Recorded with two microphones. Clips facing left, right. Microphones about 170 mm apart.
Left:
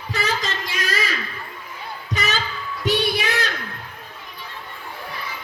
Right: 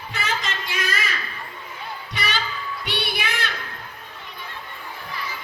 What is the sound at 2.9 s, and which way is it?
Music, 45° left (ahead or behind).